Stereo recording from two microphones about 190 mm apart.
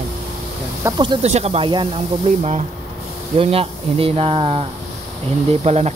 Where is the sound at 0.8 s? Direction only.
25° right (ahead or behind).